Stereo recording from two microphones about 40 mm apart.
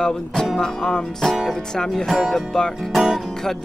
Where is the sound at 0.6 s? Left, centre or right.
Centre.